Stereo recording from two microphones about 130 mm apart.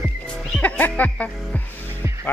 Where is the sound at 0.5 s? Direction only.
10° left (ahead or behind).